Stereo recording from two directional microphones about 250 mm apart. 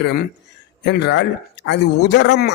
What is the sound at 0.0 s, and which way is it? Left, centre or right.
A man's voice, left.